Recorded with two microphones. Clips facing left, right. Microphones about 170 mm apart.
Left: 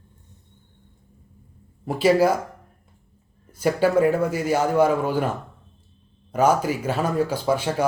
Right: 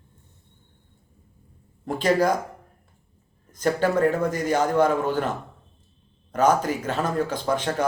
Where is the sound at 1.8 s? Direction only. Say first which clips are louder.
Left 3 dB; 10° left (ahead or behind).